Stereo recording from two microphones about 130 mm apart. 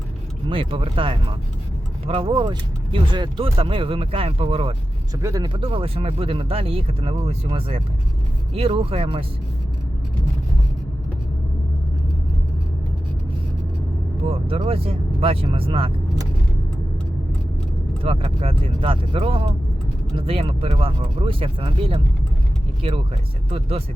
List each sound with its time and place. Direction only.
0.4 s speech: 45° right (ahead or behind)
5.2 s speech: 25° right (ahead or behind)
5.5 s speech: 45° right (ahead or behind)
14.3 s speech: 45° right (ahead or behind)
18.0 s speech: 45° right (ahead or behind)